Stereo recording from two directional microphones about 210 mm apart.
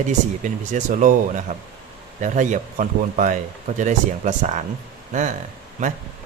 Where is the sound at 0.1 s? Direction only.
35° right (ahead or behind).